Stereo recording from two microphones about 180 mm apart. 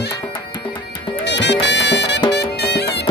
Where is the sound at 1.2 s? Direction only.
75° left (ahead or behind).